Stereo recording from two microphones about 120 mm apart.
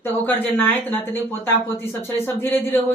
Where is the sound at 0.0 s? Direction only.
15° left (ahead or behind).